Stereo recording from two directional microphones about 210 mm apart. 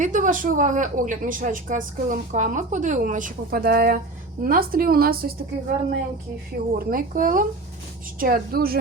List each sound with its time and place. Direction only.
0.0 s a woman's voice: 35° right (ahead or behind)
6.7 s a woman's voice: 40° right (ahead or behind)